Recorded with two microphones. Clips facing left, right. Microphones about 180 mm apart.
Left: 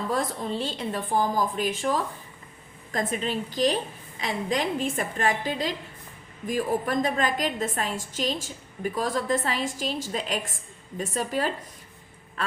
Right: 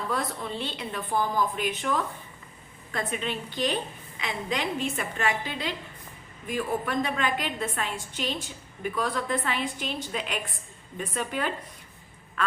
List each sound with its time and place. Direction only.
0.1 s a woman's voice: 40° left (ahead or behind)